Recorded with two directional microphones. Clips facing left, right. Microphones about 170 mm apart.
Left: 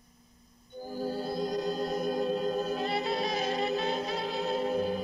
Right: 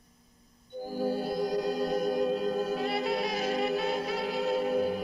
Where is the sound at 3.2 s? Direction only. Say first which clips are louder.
Right 1 dB; 20° left (ahead or behind).